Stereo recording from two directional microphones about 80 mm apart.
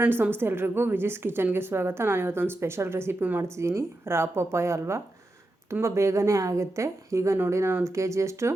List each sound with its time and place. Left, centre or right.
0.0 s a woman's voice: right
3.6 s a woman's voice: right